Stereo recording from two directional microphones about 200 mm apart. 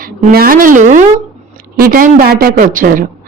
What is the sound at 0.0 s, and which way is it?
A woman's voice, 50° right (ahead or behind).